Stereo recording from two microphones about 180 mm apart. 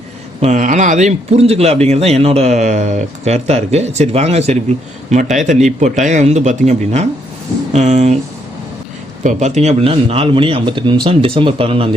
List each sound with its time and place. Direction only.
0.3 s a man's voice: 40° right (ahead or behind)
9.2 s a man's voice: 40° right (ahead or behind)